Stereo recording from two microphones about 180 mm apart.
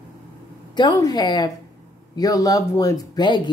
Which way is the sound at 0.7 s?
25° left (ahead or behind).